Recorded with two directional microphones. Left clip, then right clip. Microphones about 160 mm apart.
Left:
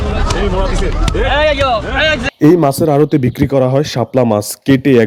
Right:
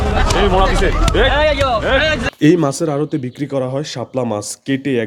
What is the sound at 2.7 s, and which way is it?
Speech, 15° left (ahead or behind).